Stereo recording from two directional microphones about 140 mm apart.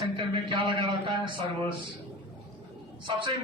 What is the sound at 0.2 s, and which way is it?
Speech, 35° right (ahead or behind).